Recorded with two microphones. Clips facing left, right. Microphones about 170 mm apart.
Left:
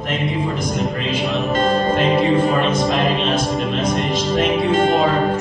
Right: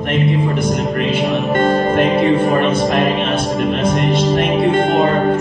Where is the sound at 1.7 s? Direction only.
60° right (ahead or behind).